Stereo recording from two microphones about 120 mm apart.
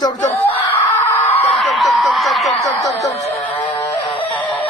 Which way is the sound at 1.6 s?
Centre (ahead or behind).